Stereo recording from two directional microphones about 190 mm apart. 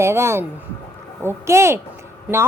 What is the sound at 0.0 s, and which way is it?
A woman's voice, 15° right (ahead or behind).